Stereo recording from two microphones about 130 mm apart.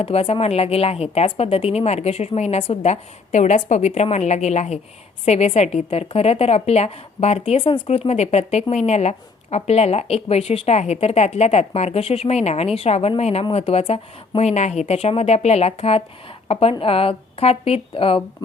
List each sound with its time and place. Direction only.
0.0 s a woman's voice: 50° left (ahead or behind)